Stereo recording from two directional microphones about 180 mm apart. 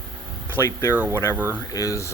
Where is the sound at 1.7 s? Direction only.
20° left (ahead or behind).